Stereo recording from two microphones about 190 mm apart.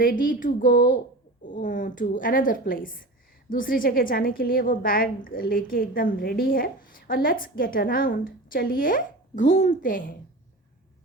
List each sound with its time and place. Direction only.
0.0 s a woman's voice: 45° left (ahead or behind)